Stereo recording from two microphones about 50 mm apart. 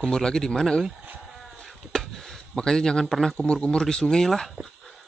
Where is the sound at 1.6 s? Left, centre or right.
Centre.